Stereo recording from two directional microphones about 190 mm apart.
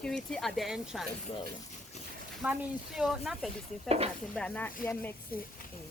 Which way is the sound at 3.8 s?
30° right (ahead or behind).